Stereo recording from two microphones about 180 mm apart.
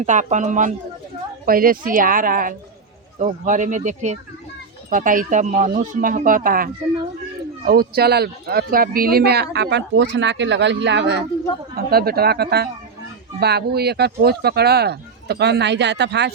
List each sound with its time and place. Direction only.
0.0 s speech: 40° right (ahead or behind)
7.7 s speech: 60° right (ahead or behind)
11.9 s speech: 60° right (ahead or behind)